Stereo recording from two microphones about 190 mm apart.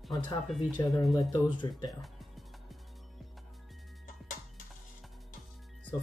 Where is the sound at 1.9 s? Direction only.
Centre (ahead or behind).